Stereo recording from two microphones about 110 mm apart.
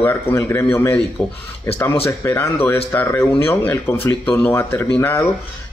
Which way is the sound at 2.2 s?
20° left (ahead or behind).